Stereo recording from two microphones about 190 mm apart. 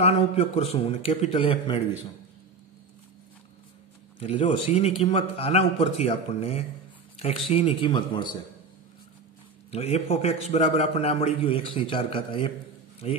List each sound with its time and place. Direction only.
0.0 s a man's voice: 30° left (ahead or behind)
4.2 s a man's voice: 30° left (ahead or behind)
9.7 s a man's voice: 35° left (ahead or behind)